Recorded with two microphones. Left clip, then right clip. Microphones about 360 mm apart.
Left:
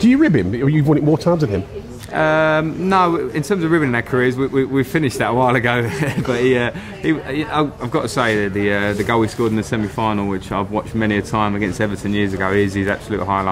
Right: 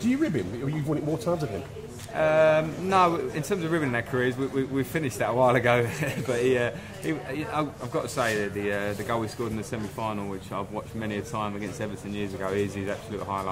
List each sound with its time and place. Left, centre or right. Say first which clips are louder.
0.1 s speech: left 12 dB; left
2.1 s speech: left 6 dB; left